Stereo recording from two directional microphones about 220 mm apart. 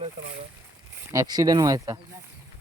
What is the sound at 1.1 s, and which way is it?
Speech, 15° right (ahead or behind).